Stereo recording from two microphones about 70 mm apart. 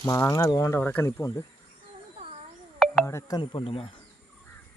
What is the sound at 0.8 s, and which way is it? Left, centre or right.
Speech, left.